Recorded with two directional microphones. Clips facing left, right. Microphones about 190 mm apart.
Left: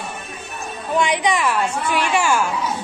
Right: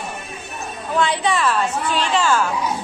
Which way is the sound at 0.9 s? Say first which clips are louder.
Left 1 dB; 15° left (ahead or behind).